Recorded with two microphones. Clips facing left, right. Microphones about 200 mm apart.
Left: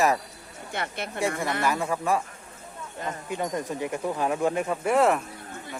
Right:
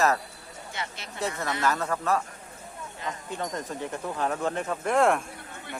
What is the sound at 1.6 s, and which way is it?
Speech, 10° left (ahead or behind).